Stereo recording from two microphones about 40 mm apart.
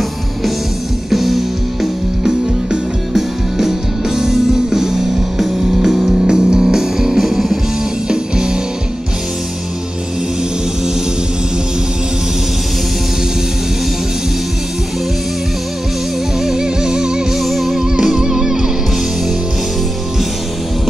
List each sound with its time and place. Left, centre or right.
1.1 s music: centre
6.2 s music: centre
16.4 s music: centre
17.5 s music: centre
17.7 s music: centre